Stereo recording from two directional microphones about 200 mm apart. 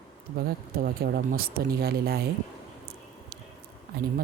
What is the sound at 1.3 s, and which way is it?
Speech, 50° right (ahead or behind).